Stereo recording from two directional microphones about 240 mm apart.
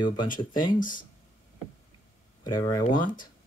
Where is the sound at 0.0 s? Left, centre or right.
Centre.